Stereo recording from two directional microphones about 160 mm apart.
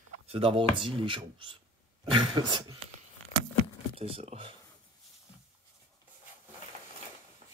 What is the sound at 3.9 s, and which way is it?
Speech, 40° right (ahead or behind).